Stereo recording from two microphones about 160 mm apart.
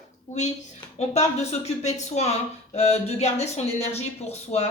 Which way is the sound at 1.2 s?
45° left (ahead or behind).